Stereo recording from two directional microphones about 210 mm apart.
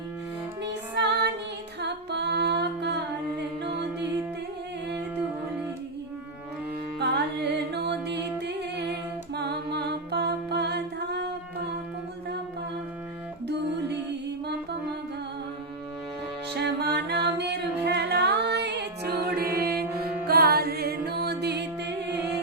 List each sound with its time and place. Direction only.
0.7 s music: 55° right (ahead or behind)
7.0 s music: 50° right (ahead or behind)
16.6 s music: 50° right (ahead or behind)